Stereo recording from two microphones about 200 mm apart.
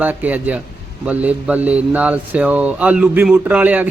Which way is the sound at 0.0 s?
10° right (ahead or behind).